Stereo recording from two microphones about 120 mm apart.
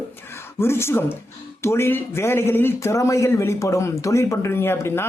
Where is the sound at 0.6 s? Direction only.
20° left (ahead or behind).